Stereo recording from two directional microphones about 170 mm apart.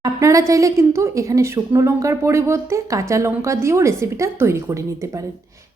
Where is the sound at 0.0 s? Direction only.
20° right (ahead or behind).